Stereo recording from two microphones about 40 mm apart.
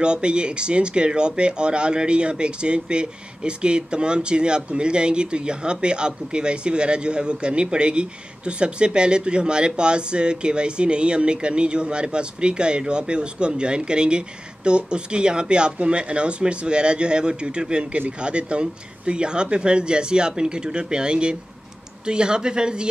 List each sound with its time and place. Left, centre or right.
0.0 s speech: right